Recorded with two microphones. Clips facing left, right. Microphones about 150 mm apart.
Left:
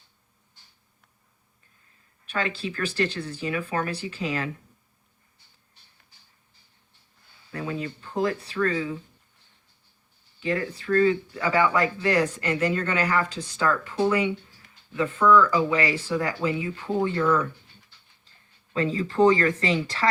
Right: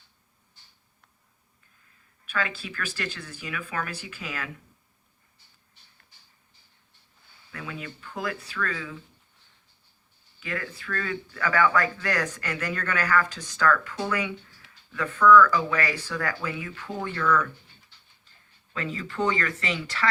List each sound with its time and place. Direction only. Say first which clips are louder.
2.3 s speech: left 3 dB; 30° left (ahead or behind)
7.5 s speech: left 7 dB; 30° left (ahead or behind)
10.4 s speech: left 7 dB; 30° left (ahead or behind)
18.7 s speech: left 7 dB; 35° left (ahead or behind)